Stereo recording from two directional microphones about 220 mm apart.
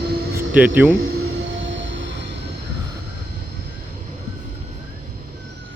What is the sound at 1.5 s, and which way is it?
Train, 55° right (ahead or behind).